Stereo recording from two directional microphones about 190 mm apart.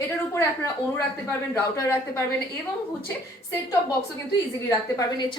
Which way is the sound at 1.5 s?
15° left (ahead or behind).